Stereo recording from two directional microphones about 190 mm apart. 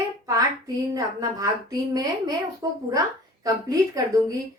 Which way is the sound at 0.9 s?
20° right (ahead or behind).